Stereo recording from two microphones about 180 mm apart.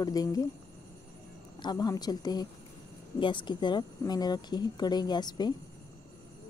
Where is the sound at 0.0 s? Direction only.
20° left (ahead or behind).